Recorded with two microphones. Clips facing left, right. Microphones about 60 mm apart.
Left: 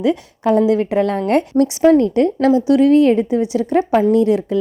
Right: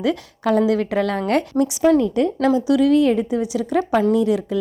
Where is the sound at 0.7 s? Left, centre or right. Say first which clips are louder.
Left 4 dB; left.